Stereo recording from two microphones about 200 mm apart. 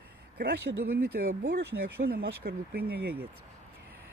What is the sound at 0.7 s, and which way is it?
Speech, 45° right (ahead or behind).